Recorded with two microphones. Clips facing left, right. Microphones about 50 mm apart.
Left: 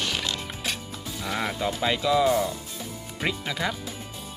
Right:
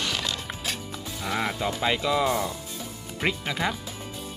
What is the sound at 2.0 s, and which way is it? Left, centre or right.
Speech, right.